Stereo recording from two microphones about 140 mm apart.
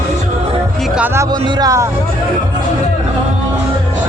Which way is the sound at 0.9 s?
15° right (ahead or behind).